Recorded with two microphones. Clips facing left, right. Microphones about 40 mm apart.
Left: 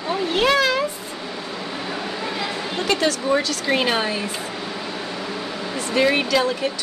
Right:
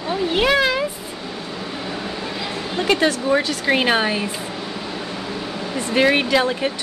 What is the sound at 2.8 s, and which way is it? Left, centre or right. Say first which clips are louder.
Speech: right 3 dB; right.